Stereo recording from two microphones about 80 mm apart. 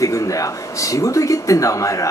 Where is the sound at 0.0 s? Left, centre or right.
Left.